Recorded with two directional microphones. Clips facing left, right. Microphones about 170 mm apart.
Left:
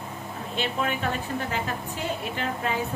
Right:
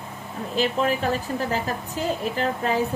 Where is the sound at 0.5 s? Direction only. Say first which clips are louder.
Right 6 dB; 35° right (ahead or behind).